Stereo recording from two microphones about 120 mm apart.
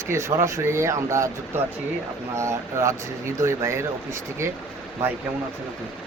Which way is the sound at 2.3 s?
25° right (ahead or behind).